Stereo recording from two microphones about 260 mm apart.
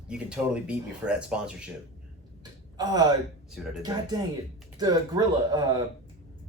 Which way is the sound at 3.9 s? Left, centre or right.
Centre.